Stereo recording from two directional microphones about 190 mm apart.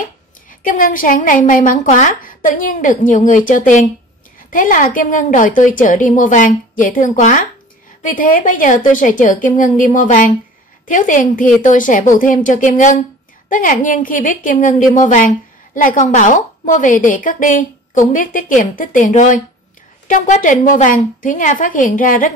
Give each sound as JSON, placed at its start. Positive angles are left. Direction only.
{"t": 0.5, "sound": "a woman's voice", "side_deg": 45}